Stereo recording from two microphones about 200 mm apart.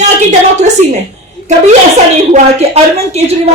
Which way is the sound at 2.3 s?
30° right (ahead or behind).